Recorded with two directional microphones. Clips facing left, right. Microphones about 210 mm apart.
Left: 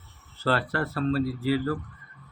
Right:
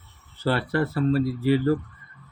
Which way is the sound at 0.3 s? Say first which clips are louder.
Right 3 dB; 15° right (ahead or behind).